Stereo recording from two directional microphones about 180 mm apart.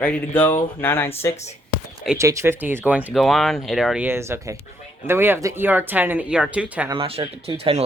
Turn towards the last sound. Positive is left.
turn(degrees=-35)  # may be behind; listen again after turning